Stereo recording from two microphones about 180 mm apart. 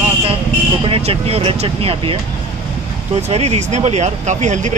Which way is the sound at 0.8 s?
30° right (ahead or behind).